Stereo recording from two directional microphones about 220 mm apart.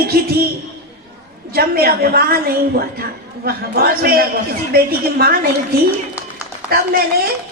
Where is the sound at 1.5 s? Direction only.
45° right (ahead or behind).